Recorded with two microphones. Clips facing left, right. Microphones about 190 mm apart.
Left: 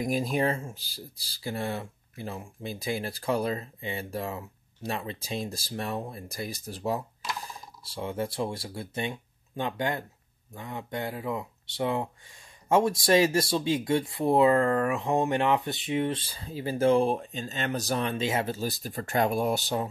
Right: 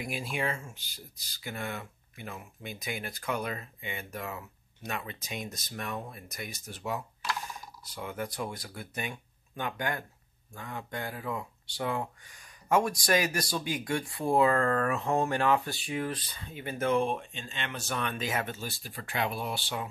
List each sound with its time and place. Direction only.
0.0 s speech: 40° left (ahead or behind)